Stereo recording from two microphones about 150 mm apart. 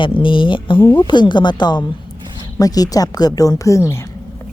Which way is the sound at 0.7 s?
20° left (ahead or behind).